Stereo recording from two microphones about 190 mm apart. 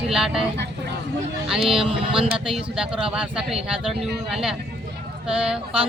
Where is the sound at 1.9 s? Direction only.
30° right (ahead or behind).